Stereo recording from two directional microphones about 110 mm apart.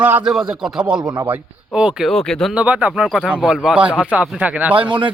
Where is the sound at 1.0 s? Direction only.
40° right (ahead or behind).